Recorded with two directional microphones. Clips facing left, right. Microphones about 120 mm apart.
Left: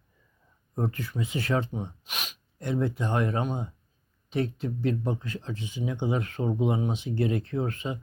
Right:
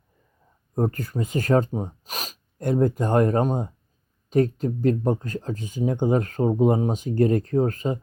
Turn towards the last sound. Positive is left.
turn(degrees=-40)  # may be behind; listen again after turning